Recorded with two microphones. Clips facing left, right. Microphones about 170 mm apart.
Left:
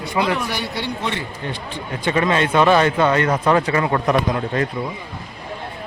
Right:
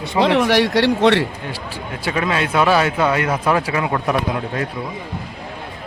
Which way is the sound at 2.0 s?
5° right (ahead or behind).